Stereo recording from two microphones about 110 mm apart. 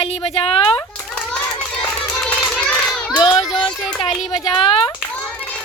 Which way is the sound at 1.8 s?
10° left (ahead or behind).